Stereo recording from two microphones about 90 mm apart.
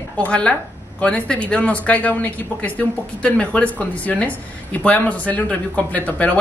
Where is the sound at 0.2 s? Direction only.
10° left (ahead or behind).